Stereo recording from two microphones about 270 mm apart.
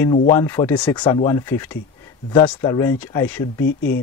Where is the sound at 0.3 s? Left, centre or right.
Centre.